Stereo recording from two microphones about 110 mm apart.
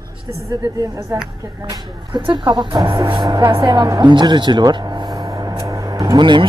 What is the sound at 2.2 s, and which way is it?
Speech, 45° right (ahead or behind).